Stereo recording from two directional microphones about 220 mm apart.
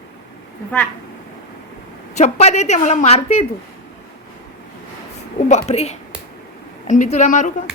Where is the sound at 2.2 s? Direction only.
30° left (ahead or behind).